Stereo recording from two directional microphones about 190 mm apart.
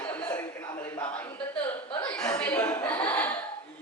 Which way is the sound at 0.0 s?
5° left (ahead or behind).